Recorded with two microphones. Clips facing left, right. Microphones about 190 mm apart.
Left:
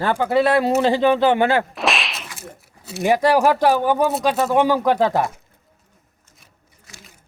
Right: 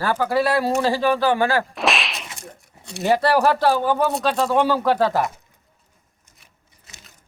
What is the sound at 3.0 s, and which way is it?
Speech, 15° left (ahead or behind).